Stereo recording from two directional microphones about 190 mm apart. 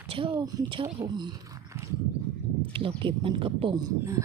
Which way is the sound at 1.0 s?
25° right (ahead or behind).